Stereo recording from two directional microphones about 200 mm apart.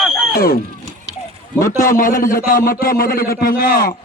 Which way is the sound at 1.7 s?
45° left (ahead or behind).